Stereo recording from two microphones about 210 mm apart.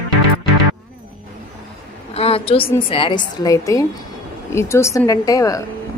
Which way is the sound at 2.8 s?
25° left (ahead or behind).